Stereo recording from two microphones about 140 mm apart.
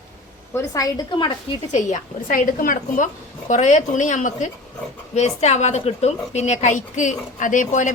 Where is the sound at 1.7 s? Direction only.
60° left (ahead or behind); by 3.1 s 80° left.